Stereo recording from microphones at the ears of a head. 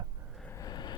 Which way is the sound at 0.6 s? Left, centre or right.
Left.